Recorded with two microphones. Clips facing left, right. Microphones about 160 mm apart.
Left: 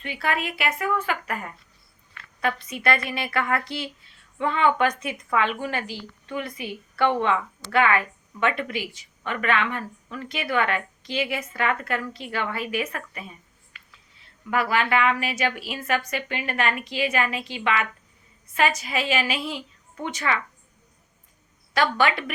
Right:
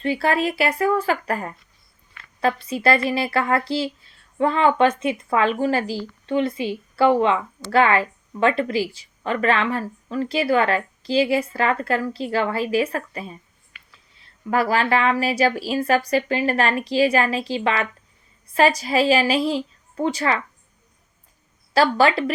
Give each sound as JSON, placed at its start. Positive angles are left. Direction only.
{"t": 0.0, "sound": "a woman's voice", "side_deg": -35}
{"t": 2.6, "sound": "a woman's voice", "side_deg": -30}
{"t": 5.4, "sound": "a woman's voice", "side_deg": -40}
{"t": 14.5, "sound": "a woman's voice", "side_deg": -35}
{"t": 21.7, "sound": "a woman's voice", "side_deg": -35}